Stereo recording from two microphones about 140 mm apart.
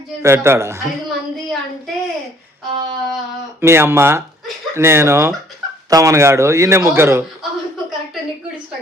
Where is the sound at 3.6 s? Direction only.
15° right (ahead or behind).